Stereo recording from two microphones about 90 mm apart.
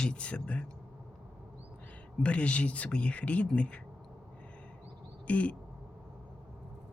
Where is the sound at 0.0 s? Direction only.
10° left (ahead or behind).